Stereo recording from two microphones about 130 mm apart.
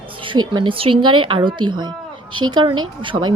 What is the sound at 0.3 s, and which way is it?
A woman's voice, 35° right (ahead or behind).